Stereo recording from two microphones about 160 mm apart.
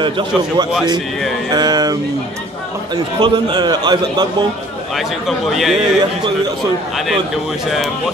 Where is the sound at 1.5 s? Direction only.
25° right (ahead or behind).